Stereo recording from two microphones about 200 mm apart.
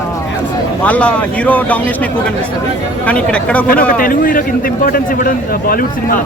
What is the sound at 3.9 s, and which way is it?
A man's voice, 45° left (ahead or behind).